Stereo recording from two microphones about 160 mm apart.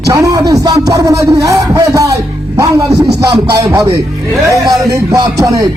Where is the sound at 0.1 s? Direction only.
20° right (ahead or behind).